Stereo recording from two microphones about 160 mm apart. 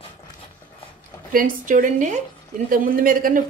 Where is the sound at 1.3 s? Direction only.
55° right (ahead or behind).